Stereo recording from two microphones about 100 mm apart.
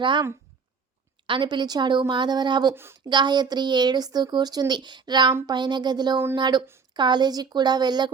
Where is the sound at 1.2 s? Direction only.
55° right (ahead or behind).